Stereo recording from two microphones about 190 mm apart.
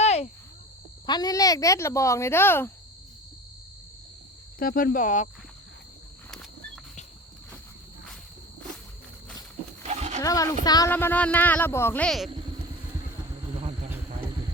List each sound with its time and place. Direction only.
0.0 s cricket: 35° left (ahead or behind)
1.0 s speech: 20° left (ahead or behind)
4.6 s speech: 50° left (ahead or behind)
9.8 s goat: 35° right (ahead or behind)
10.2 s speech: 20° left (ahead or behind)
10.9 s speech: 10° left (ahead or behind)